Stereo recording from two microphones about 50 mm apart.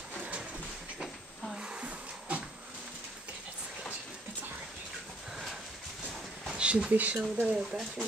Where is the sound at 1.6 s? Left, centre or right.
Centre.